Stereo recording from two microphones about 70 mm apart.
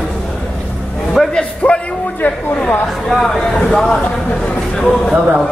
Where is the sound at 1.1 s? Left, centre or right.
Centre.